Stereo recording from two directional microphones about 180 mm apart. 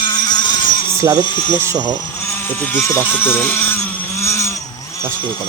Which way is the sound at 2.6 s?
10° left (ahead or behind).